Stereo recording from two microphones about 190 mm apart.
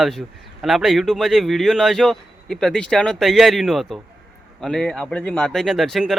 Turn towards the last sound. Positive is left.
turn(degrees=0)  # may be behind; listen again after turning